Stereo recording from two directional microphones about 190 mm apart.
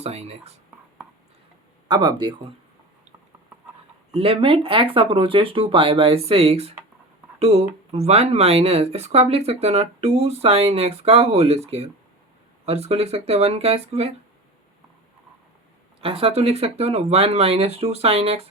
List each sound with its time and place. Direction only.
0.0 s speech: 35° right (ahead or behind)
1.9 s speech: 25° right (ahead or behind)
4.1 s speech: 30° right (ahead or behind)
16.0 s speech: 30° right (ahead or behind)